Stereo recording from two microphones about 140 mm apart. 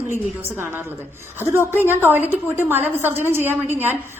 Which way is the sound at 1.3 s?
15° right (ahead or behind).